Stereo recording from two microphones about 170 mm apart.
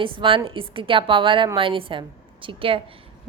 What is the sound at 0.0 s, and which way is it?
A woman's voice, 30° right (ahead or behind).